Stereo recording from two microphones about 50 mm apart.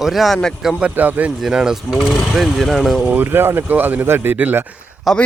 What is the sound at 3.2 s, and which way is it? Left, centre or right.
Speech, right.